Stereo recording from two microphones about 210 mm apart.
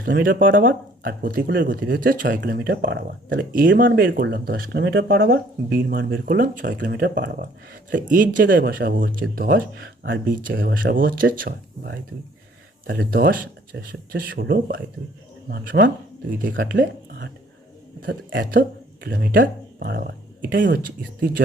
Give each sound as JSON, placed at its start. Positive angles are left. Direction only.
{"t": 0.0, "sound": "speech", "side_deg": -40}
{"t": 10.2, "sound": "speech", "side_deg": -40}
{"t": 10.5, "sound": "speech", "side_deg": -60}
{"t": 10.9, "sound": "speech", "side_deg": -40}